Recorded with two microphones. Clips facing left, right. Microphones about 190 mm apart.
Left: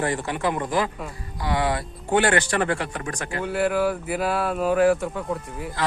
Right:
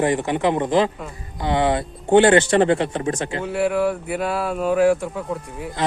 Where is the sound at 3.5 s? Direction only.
Centre (ahead or behind).